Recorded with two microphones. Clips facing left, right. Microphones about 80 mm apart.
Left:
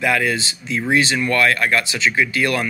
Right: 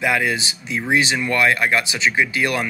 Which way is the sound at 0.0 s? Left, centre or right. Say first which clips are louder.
Left 1 dB; centre.